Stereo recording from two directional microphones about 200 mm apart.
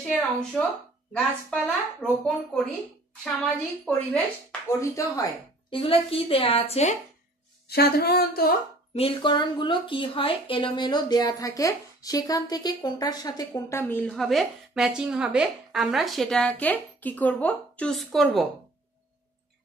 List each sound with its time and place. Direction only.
0.1 s speech: 5° left (ahead or behind)
2.2 s a woman's voice: 5° left (ahead or behind); by 7.0 s 35° left (ahead or behind)
7.6 s speech: 50° left (ahead or behind)
8.9 s speech: 25° left (ahead or behind); by 18.5 s centre (ahead or behind)